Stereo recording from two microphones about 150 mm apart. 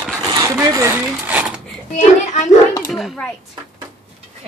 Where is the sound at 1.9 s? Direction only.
50° left (ahead or behind).